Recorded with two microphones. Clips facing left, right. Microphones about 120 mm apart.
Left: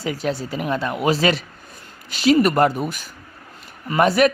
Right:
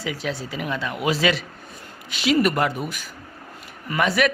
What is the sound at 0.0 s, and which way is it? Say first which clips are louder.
Speech: left 4 dB; 45° left (ahead or behind).